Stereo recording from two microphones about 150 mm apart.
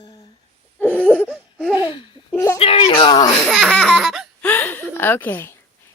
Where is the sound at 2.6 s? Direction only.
35° left (ahead or behind).